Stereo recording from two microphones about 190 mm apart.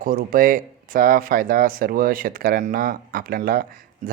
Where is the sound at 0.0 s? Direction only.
45° right (ahead or behind).